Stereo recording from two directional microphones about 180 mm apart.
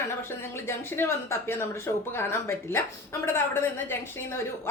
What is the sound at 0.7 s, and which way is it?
A woman's voice, 15° left (ahead or behind).